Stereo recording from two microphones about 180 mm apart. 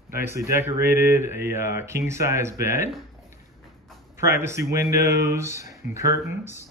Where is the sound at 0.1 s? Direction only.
15° right (ahead or behind).